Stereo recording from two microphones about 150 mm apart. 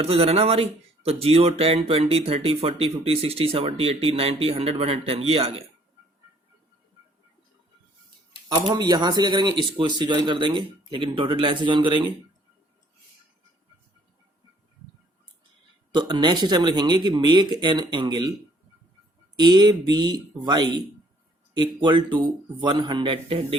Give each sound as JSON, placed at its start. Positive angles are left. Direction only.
{"t": 0.0, "sound": "speech", "side_deg": -40}
{"t": 8.4, "sound": "speech", "side_deg": -25}
{"t": 15.9, "sound": "speech", "side_deg": -30}
{"t": 19.4, "sound": "speech", "side_deg": -25}